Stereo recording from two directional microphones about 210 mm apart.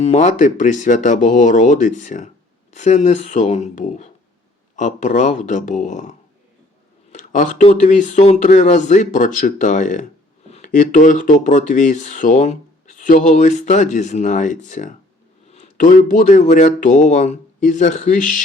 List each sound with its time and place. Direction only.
0.0 s speech: 35° left (ahead or behind)